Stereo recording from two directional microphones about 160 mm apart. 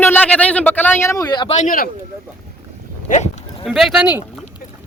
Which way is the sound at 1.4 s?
40° left (ahead or behind).